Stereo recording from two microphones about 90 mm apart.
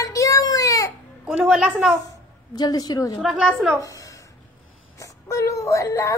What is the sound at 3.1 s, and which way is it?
Speech, 10° right (ahead or behind).